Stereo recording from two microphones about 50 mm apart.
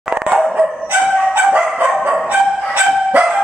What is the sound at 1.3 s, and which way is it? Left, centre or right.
Dog, right.